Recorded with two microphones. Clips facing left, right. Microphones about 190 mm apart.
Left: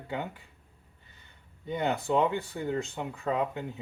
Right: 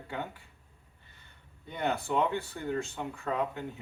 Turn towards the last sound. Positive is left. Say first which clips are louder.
# left 3 dB
turn(degrees=20)  # may be behind; listen again after turning